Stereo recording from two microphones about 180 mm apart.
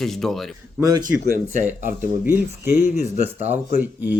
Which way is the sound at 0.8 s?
20° right (ahead or behind).